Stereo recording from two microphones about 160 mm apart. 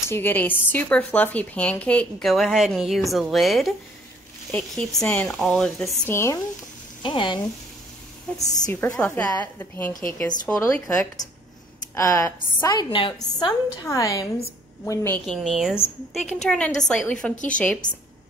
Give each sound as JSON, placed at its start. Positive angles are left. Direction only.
{"t": 0.1, "sound": "speech", "side_deg": 10}
{"t": 6.0, "sound": "speech", "side_deg": 15}
{"t": 7.0, "sound": "speech", "side_deg": 30}
{"t": 8.4, "sound": "a woman's voice", "side_deg": 20}
{"t": 9.0, "sound": "a woman's voice", "side_deg": 10}
{"t": 15.2, "sound": "speech", "side_deg": 0}